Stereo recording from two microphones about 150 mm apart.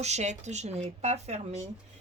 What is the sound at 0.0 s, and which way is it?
Speech, 50° right (ahead or behind).